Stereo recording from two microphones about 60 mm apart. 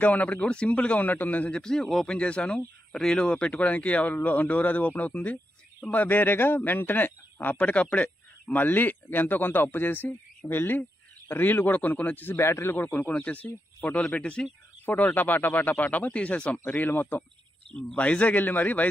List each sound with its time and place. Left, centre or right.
0.0 s a man's voice: left
1.6 s a man's voice: centre
2.1 s a man's voice: centre
12.4 s speech: left
12.7 s a man's voice: left
14.9 s a man's voice: left